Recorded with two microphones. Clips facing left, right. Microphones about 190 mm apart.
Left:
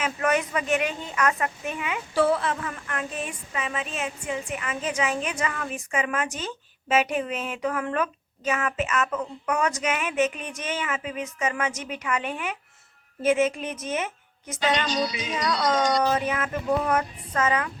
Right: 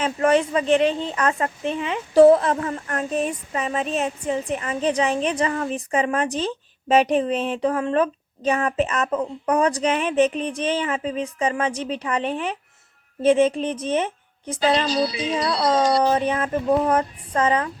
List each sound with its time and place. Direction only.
0.0 s speech: 30° right (ahead or behind)